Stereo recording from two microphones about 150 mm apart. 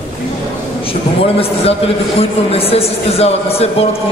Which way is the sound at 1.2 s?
40° left (ahead or behind).